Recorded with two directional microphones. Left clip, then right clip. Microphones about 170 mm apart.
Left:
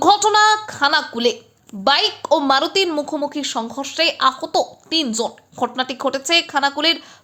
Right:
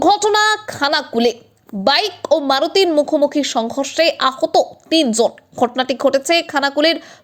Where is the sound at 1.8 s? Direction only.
20° right (ahead or behind).